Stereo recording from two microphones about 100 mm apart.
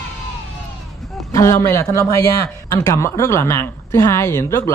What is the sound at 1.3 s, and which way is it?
A man's voice, 30° left (ahead or behind).